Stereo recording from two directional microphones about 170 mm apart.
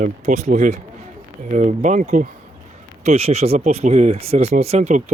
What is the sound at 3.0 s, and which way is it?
Speech, 35° right (ahead or behind).